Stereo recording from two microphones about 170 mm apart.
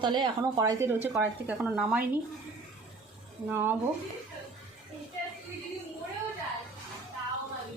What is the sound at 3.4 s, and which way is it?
Speech, 15° right (ahead or behind).